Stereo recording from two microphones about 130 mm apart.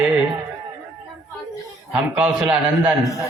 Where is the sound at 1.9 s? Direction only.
10° right (ahead or behind).